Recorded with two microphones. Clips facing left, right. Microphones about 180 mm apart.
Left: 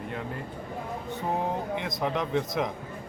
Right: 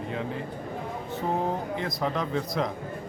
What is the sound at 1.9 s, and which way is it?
Speech, 20° left (ahead or behind).